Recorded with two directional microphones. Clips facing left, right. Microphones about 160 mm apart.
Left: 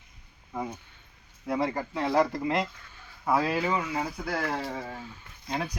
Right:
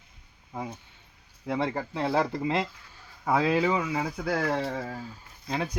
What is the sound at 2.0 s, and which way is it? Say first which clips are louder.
Speech: left 2 dB; 30° right (ahead or behind).